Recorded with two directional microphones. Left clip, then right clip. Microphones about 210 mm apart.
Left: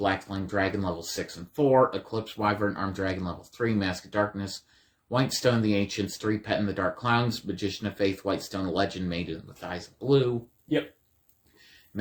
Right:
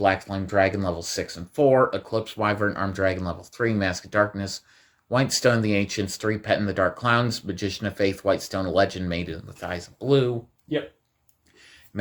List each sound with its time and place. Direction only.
0.0 s speech: 45° right (ahead or behind)